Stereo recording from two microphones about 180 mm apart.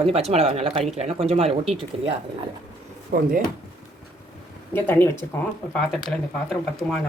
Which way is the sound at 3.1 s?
55° right (ahead or behind).